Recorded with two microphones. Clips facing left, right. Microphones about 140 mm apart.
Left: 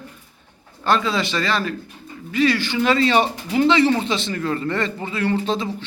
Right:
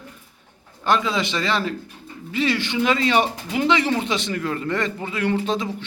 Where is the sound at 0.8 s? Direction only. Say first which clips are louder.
Left 1 dB; 15° right (ahead or behind).